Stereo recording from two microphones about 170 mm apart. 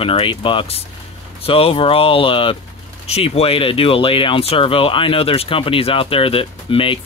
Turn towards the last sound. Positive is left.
turn(degrees=30)  # may be behind; listen again after turning